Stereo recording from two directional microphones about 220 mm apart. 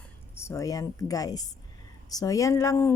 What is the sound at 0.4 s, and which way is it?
Speech, 15° left (ahead or behind).